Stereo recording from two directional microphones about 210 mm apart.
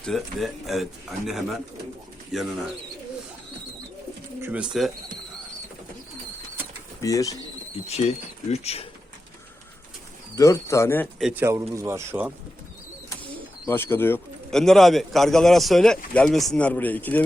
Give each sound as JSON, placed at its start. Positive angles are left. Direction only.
{"t": 0.0, "sound": "speech", "side_deg": 0}
{"t": 4.4, "sound": "speech", "side_deg": -5}
{"t": 7.0, "sound": "speech", "side_deg": 15}
{"t": 7.9, "sound": "speech", "side_deg": 30}
{"t": 10.3, "sound": "speech", "side_deg": 15}
{"t": 11.2, "sound": "speech", "side_deg": -5}
{"t": 13.7, "sound": "speech", "side_deg": 10}